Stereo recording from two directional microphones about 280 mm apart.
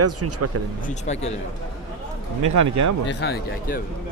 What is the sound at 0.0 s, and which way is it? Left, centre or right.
Speech, right.